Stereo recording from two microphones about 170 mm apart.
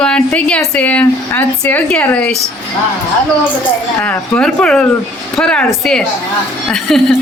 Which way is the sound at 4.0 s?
5° left (ahead or behind).